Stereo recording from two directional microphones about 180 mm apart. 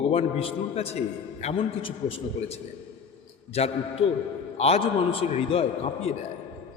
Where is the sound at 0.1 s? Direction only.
35° left (ahead or behind).